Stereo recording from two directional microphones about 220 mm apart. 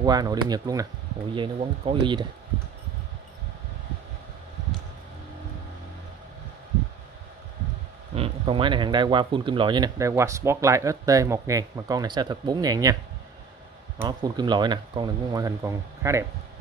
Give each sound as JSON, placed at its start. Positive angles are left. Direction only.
{"t": 0.0, "sound": "speech", "side_deg": -20}
{"t": 8.1, "sound": "speech", "side_deg": -25}
{"t": 14.0, "sound": "speech", "side_deg": -20}